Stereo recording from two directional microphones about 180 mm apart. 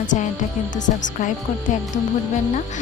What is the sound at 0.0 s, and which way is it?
Speech, 45° left (ahead or behind).